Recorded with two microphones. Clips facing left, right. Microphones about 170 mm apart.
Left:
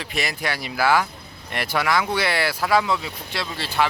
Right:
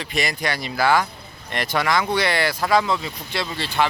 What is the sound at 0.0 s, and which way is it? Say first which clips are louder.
Speech: right 2 dB; 5° left (ahead or behind).